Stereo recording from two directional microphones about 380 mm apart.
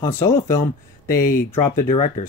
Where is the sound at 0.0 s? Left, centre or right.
Centre.